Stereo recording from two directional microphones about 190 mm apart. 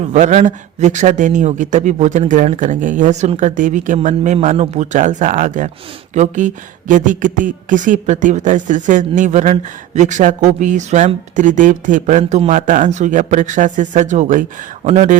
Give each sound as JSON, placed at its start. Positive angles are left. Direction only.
{"t": 0.0, "sound": "a woman's voice", "side_deg": -35}